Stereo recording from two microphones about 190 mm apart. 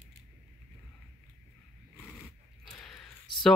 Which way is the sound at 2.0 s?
5° left (ahead or behind).